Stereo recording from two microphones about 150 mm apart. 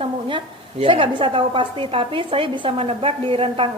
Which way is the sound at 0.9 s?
35° right (ahead or behind).